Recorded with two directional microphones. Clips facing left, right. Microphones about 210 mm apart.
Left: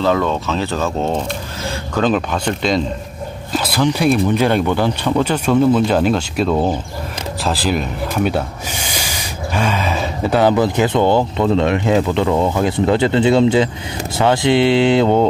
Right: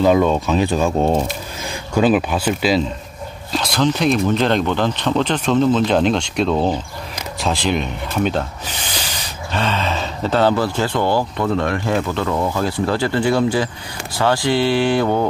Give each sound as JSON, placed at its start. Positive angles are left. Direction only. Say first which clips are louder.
{"t": 0.0, "sound": "speech", "louder": "right 2 dB", "side_deg": -15}
{"t": 3.5, "sound": "speech", "louder": "left 1 dB", "side_deg": 5}